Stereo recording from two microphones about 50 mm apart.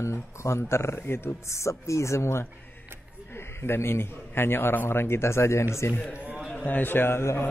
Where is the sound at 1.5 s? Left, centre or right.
Left.